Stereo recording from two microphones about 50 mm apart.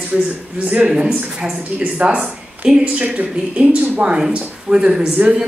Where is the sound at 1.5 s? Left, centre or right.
Right.